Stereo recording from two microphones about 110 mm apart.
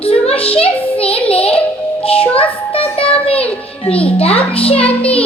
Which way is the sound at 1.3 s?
60° left (ahead or behind).